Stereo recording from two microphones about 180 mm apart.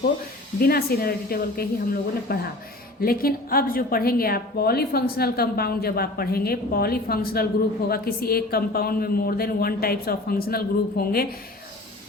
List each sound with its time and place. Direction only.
0.6 s a woman's voice: 55° left (ahead or behind)